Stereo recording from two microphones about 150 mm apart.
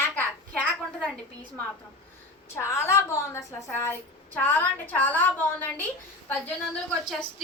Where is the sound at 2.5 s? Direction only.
15° left (ahead or behind).